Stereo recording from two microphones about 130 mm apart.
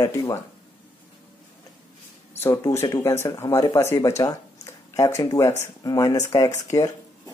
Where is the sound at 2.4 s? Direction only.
20° left (ahead or behind).